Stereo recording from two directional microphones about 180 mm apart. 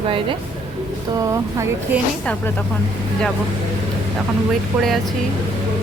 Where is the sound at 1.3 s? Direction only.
15° right (ahead or behind).